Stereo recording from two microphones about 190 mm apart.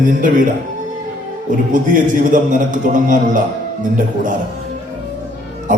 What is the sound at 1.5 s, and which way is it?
A man's voice, 45° right (ahead or behind).